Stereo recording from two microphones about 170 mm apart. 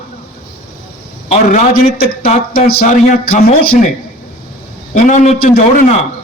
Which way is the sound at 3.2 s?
60° left (ahead or behind).